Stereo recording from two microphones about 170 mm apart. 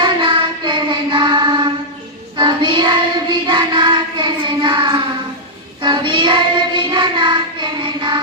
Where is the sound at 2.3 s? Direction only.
25° right (ahead or behind).